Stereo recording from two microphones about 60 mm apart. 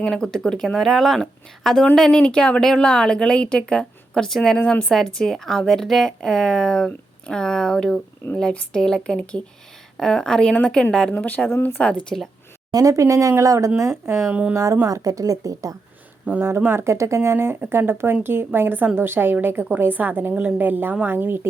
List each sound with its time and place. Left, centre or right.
0.0 s speech: centre
4.5 s speech: centre
11.1 s speech: left
11.4 s speech: left
11.8 s speech: centre
12.7 s speech: right
13.7 s speech: right
14.3 s speech: right
14.5 s speech: right
14.8 s a woman's voice: right
16.3 s speech: right
16.6 s a woman's voice: right